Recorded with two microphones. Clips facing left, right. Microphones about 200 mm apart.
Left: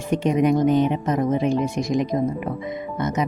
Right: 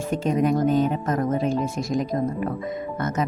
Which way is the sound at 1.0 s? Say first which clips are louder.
Left 2 dB; 15° left (ahead or behind).